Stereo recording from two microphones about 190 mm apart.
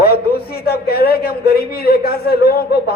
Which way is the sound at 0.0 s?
55° left (ahead or behind).